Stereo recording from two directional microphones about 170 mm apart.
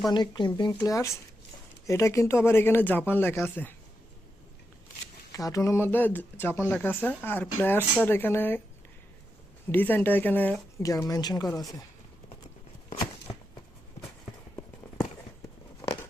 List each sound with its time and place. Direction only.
0.1 s speech: 25° left (ahead or behind); by 3.8 s 10° left (ahead or behind)
5.3 s speech: 20° left (ahead or behind)
9.7 s speech: 10° left (ahead or behind)